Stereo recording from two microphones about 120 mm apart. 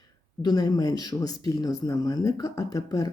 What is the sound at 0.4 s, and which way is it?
Speech, 30° left (ahead or behind).